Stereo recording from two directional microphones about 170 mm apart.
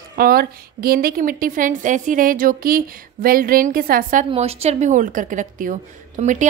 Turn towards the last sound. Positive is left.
turn(degrees=-45)  # may be behind; listen again after turning